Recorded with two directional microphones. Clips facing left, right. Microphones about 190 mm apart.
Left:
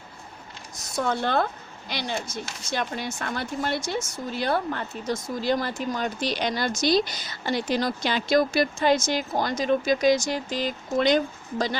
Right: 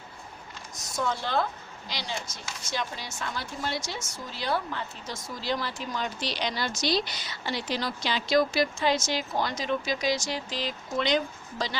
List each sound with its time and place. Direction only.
0.9 s speech: 60° left (ahead or behind)